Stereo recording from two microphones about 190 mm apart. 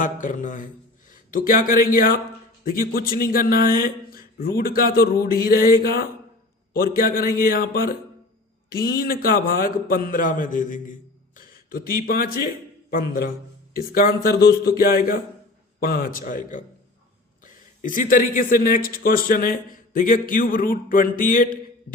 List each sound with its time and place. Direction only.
0.0 s a man's voice: 45° left (ahead or behind)